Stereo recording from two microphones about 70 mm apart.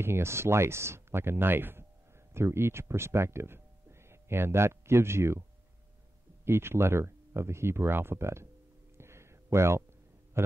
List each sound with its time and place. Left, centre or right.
0.0 s speech: right
6.4 s speech: right
8.9 s a sound: right